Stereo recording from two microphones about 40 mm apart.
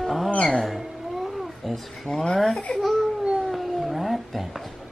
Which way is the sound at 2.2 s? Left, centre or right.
Centre.